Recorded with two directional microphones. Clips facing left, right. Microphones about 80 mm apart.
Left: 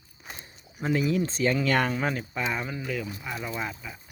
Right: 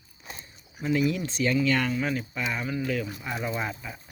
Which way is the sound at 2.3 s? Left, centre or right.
Left.